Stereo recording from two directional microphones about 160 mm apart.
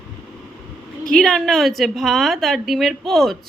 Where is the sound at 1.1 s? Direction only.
Centre (ahead or behind).